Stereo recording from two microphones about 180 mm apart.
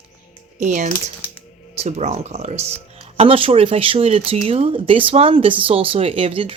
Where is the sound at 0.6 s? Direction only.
40° right (ahead or behind).